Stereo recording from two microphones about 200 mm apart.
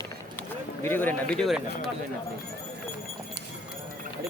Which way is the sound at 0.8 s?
10° left (ahead or behind).